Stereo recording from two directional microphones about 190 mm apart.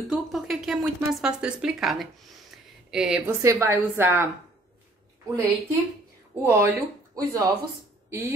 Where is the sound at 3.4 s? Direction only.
15° right (ahead or behind).